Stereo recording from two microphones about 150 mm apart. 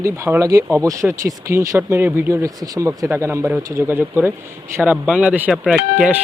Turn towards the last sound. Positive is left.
turn(degrees=-10)  # may be behind; listen again after turning